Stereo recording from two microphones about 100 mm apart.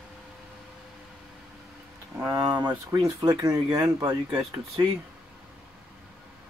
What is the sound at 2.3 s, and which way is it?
Speech, 45° right (ahead or behind).